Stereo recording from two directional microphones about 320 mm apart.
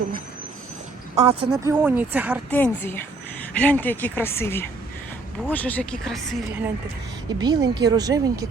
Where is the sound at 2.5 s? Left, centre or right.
Centre.